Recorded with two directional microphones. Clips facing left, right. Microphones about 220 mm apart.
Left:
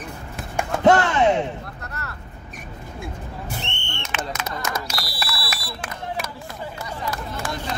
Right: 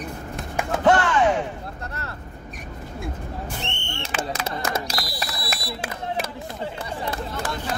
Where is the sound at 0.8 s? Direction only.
25° left (ahead or behind).